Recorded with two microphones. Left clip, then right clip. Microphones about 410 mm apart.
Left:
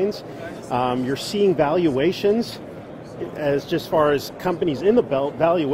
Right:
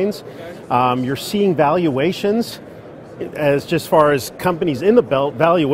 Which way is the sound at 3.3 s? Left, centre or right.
Right.